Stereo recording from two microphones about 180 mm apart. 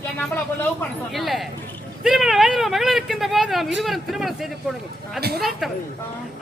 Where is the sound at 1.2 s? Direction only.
Centre (ahead or behind).